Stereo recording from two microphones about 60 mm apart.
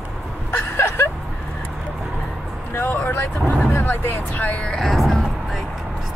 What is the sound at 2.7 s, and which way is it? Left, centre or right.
Speech, left.